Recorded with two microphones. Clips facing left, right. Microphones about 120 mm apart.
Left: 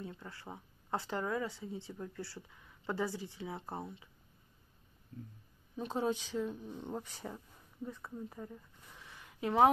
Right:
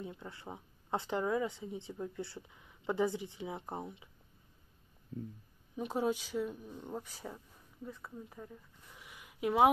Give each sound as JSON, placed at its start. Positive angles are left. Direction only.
{"t": 0.0, "sound": "speech", "side_deg": -20}
{"t": 5.8, "sound": "speech", "side_deg": -10}
{"t": 8.9, "sound": "a sound", "side_deg": -10}